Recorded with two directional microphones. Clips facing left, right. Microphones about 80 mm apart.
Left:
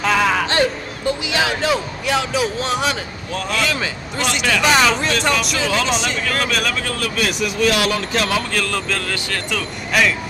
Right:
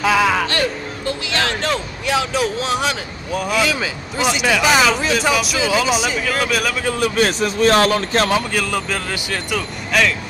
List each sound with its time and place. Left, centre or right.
0.0 s speech: centre
0.5 s speech: left; by 7.1 s centre
7.2 s speech: right
8.5 s speech: centre
9.9 s speech: centre